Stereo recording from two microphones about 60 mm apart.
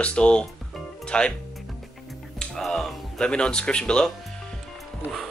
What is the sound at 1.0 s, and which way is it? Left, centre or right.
Music, centre.